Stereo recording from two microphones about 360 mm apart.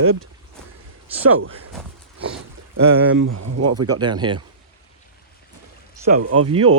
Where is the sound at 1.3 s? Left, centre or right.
Right.